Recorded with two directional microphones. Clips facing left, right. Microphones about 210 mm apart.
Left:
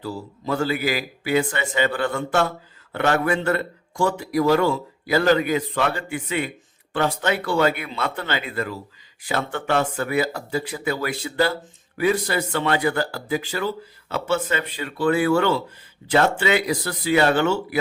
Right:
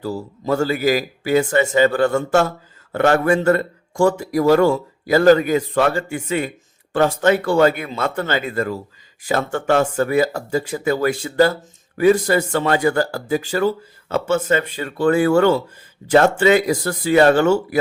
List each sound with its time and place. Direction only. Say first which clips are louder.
0.0 s speech: right 5 dB; 45° right (ahead or behind)